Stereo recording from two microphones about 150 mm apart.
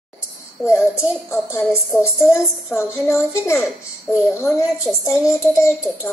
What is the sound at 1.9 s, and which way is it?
Speech, 20° left (ahead or behind).